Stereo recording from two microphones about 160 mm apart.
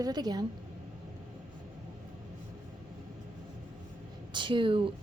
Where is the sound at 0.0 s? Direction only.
25° right (ahead or behind).